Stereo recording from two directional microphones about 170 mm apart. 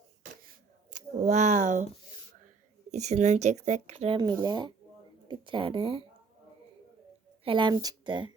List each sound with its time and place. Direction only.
1.2 s speech: 45° right (ahead or behind)
2.9 s speech: 40° right (ahead or behind)
4.2 s speech: 25° right (ahead or behind)
7.4 s speech: 30° right (ahead or behind)